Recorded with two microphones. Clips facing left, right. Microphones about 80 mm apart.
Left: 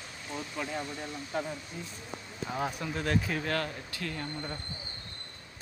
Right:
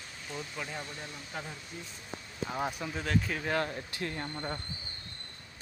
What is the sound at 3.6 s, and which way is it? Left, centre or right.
Speech, right.